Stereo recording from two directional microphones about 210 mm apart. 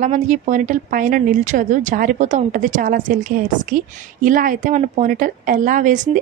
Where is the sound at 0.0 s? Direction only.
35° right (ahead or behind).